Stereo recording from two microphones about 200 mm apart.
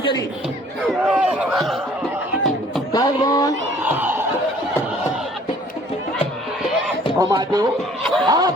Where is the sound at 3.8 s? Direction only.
10° right (ahead or behind).